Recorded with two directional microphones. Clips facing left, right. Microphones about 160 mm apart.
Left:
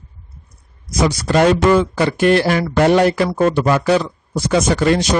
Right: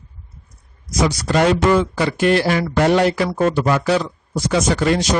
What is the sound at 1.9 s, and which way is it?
A man's voice, 55° left (ahead or behind).